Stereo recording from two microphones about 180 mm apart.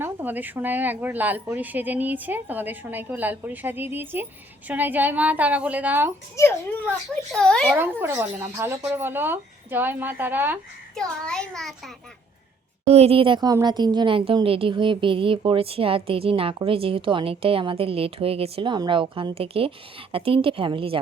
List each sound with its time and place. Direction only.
0.0 s speech: 10° right (ahead or behind)
6.3 s a child's voice: 10° left (ahead or behind)
7.8 s speech: 10° right (ahead or behind)
10.9 s a child's voice: 5° left (ahead or behind)
12.9 s a woman's voice: 35° right (ahead or behind)